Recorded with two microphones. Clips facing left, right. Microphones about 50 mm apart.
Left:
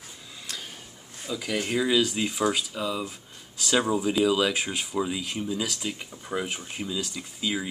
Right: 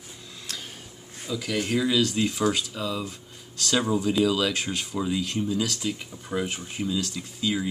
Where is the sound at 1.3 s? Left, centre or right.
Centre.